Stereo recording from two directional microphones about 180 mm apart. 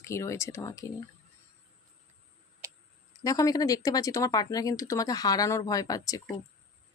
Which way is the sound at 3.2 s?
20° left (ahead or behind).